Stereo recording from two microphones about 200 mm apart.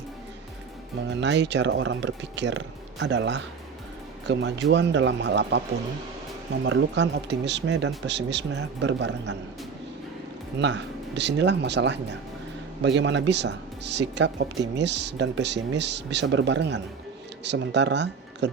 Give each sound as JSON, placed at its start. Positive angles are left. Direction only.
{"t": 1.1, "sound": "speech", "side_deg": -60}
{"t": 6.7, "sound": "speech", "side_deg": -65}
{"t": 10.6, "sound": "speech", "side_deg": -60}